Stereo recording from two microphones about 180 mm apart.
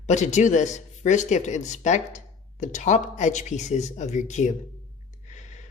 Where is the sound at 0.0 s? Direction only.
40° left (ahead or behind).